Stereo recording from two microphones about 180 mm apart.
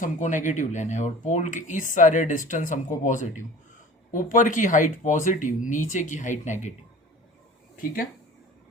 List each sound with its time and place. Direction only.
0.0 s speech: 45° left (ahead or behind)